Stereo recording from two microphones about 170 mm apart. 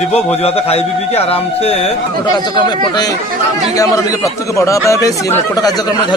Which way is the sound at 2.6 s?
25° left (ahead or behind).